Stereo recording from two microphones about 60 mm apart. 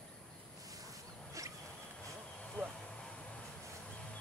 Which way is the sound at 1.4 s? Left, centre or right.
Right.